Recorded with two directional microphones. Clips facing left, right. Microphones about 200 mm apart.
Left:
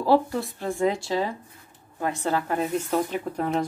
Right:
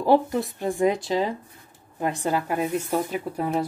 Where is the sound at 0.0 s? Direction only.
20° right (ahead or behind).